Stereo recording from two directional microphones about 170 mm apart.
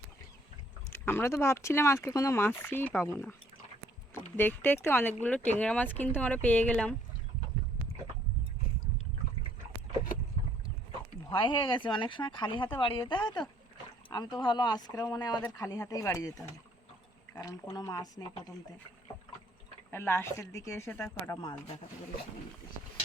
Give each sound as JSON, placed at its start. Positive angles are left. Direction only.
{"t": 0.9, "sound": "speech", "side_deg": 15}
{"t": 4.4, "sound": "speech", "side_deg": 10}
{"t": 11.3, "sound": "speech", "side_deg": 30}
{"t": 19.9, "sound": "speech", "side_deg": 15}